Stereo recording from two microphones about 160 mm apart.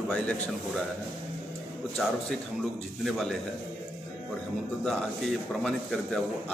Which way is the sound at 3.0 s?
Centre (ahead or behind).